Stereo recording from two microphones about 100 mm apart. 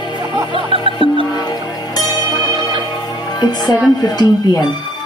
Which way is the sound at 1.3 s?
40° left (ahead or behind).